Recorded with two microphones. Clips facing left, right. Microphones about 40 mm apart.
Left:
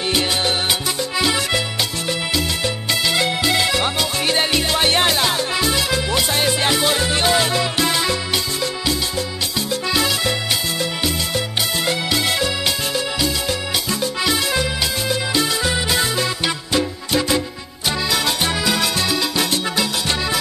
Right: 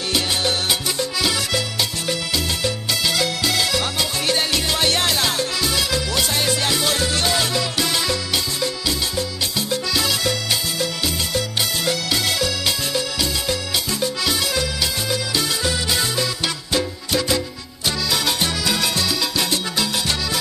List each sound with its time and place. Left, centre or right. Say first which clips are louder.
0.1 s music: left 1 dB; left
2.9 s music: left 3 dB; left
9.8 s music: left 5 dB; left
11.8 s music: left 2 dB; left
13.8 s music: left 3 dB; left
17.8 s music: left 2 dB; centre